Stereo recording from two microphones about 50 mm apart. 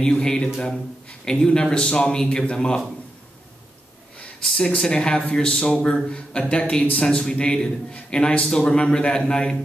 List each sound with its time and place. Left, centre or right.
0.0 s a man's voice: centre
4.6 s a man's voice: centre